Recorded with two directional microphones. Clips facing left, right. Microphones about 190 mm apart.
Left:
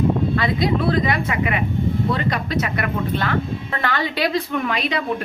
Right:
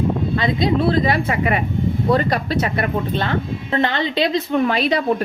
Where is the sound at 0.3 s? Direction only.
25° right (ahead or behind).